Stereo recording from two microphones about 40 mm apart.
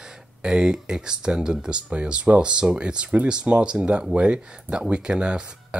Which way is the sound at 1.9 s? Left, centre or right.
Right.